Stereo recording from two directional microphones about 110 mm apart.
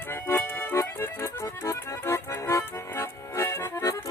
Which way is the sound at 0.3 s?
20° left (ahead or behind).